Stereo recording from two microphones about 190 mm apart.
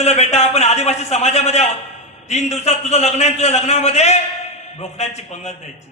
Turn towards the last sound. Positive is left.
turn(degrees=35)  # may be behind; listen again after turning